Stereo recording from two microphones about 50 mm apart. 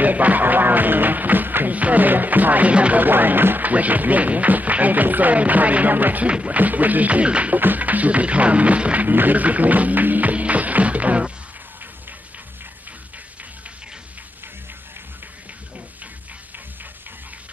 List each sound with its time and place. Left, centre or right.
0.0 s music: right
2.7 s music: right
3.0 s speech: right
6.2 s music: right
7.5 s music: right
9.1 s speech: right